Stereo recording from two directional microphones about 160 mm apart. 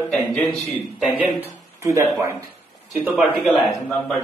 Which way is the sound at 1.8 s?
15° right (ahead or behind).